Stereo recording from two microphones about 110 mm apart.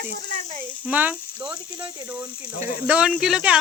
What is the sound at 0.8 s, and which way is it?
Speech, 15° right (ahead or behind).